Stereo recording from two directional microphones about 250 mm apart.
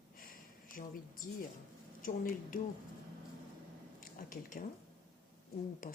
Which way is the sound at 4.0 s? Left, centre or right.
Left.